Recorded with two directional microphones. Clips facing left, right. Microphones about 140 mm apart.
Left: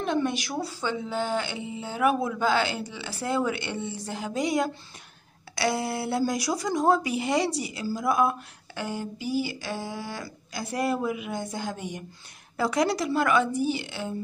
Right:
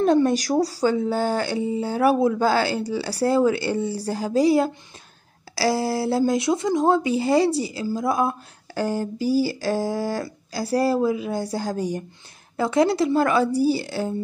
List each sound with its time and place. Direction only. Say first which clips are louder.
0.0 s speech: right 8 dB; 40° right (ahead or behind)
12.5 s speech: right 5 dB; 25° right (ahead or behind)